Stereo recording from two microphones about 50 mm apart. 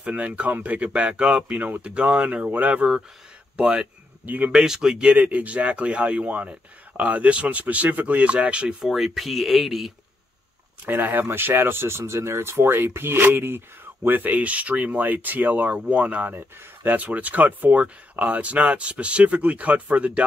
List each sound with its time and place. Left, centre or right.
0.0 s speech: right
4.2 s speech: right
4.6 s speech: centre
5.1 s speech: right
8.8 s speech: centre
10.9 s speech: right
14.0 s speech: right